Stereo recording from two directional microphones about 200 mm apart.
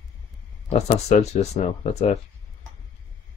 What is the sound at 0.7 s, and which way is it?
Speech, 35° left (ahead or behind).